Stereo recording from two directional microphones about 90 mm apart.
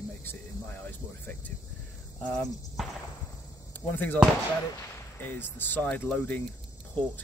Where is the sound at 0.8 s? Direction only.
20° left (ahead or behind).